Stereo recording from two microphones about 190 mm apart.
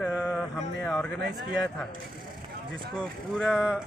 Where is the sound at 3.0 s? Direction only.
Centre (ahead or behind).